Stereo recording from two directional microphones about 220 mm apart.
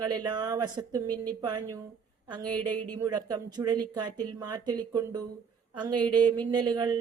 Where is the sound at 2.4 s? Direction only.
90° right.